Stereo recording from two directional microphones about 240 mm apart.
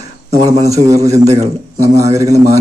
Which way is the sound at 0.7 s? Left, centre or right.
Centre.